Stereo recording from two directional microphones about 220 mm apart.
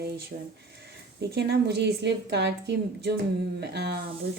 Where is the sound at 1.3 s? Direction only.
50° right (ahead or behind).